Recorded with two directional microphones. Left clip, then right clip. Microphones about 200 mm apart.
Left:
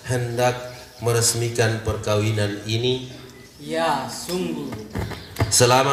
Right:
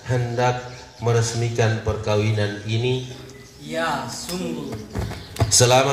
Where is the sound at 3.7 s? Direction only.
40° left (ahead or behind).